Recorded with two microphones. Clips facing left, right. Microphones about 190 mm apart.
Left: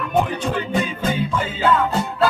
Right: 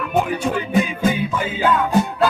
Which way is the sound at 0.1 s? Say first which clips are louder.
Right 1 dB; 10° right (ahead or behind).